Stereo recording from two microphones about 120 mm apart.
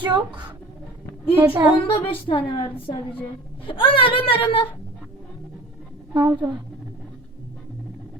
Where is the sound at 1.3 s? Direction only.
15° right (ahead or behind).